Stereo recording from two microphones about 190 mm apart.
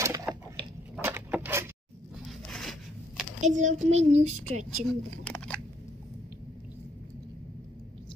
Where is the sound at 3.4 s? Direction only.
40° right (ahead or behind).